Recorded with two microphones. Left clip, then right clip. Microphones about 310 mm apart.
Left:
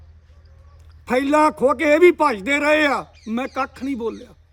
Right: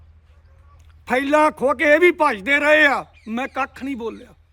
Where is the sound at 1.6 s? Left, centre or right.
Centre.